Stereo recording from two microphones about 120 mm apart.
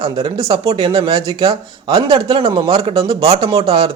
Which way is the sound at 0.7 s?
45° right (ahead or behind).